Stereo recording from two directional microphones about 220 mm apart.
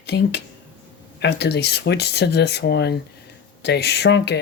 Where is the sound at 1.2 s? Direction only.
50° left (ahead or behind).